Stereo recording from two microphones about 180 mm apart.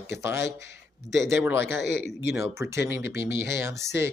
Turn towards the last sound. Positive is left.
turn(degrees=-15)  # may be behind; listen again after turning